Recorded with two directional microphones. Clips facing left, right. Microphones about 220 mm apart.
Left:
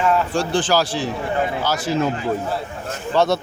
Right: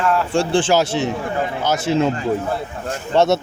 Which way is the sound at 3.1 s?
25° right (ahead or behind).